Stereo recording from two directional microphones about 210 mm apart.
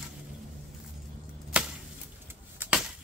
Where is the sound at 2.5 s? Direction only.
10° right (ahead or behind).